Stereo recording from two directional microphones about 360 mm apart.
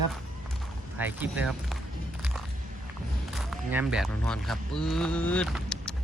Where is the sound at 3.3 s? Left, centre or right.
Centre.